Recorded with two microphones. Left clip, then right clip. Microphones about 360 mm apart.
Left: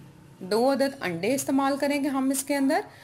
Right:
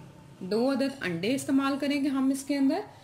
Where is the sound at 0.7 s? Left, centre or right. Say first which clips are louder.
Left 4 dB; centre.